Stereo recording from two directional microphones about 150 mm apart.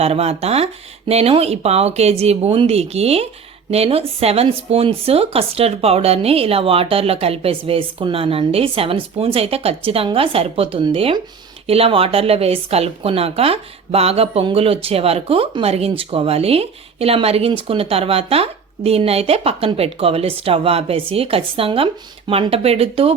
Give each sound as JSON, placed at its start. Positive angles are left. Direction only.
{"t": 0.0, "sound": "a woman's voice", "side_deg": -45}